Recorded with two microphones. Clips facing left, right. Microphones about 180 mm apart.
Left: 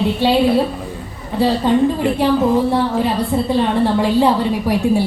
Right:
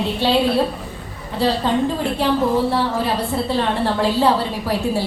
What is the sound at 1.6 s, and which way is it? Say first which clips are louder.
A woman's voice: left 5 dB; 15° left (ahead or behind).